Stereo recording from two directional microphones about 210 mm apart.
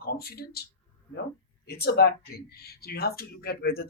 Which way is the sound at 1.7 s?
50° left (ahead or behind).